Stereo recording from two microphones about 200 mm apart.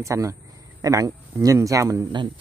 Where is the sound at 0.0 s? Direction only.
15° right (ahead or behind).